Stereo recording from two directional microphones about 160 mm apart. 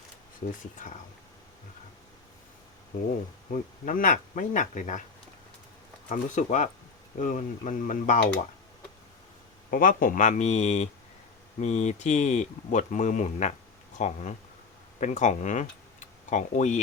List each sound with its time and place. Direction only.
0.6 s speech: 50° left (ahead or behind)
3.5 s speech: 55° left (ahead or behind)
6.1 s speech: 50° left (ahead or behind)
9.6 s speech: 60° left (ahead or behind)